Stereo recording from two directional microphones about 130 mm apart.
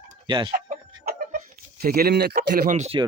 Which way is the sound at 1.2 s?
90° right.